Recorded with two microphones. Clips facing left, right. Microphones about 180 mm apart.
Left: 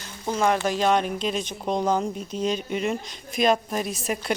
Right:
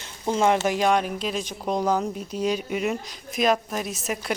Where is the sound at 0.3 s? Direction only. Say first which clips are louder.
Right 2 dB; 20° right (ahead or behind).